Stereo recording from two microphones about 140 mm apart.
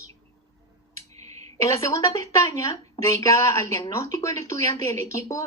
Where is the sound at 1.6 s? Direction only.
20° left (ahead or behind).